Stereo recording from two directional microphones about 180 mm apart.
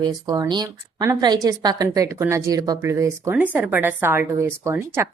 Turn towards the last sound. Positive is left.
turn(degrees=-15)  # may be behind; listen again after turning